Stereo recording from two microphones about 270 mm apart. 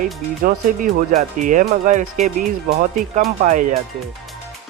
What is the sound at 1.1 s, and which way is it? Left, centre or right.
Speech, right.